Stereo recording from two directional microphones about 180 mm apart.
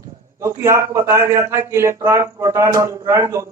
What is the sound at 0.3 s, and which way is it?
A man's voice, 15° right (ahead or behind).